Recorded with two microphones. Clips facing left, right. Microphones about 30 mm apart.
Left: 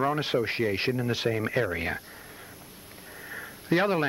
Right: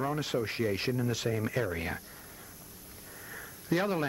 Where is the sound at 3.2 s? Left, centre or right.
Left.